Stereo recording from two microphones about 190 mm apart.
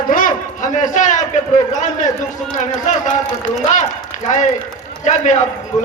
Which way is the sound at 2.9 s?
40° left (ahead or behind).